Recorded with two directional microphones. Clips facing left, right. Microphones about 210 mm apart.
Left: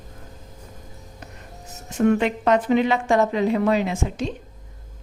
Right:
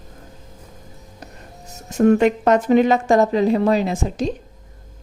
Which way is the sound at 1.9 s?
40° right (ahead or behind).